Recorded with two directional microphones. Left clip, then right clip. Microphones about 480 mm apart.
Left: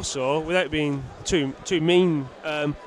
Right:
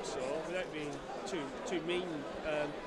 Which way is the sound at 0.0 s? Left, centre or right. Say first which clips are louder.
Left 13 dB; left.